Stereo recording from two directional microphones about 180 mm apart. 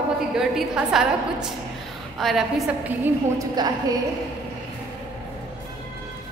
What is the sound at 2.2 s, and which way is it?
A woman's voice, centre (ahead or behind).